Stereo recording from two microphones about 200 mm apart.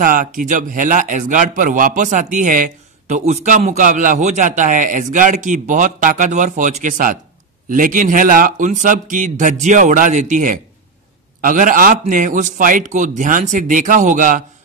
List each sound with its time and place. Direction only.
0.0 s a man's voice: 45° right (ahead or behind)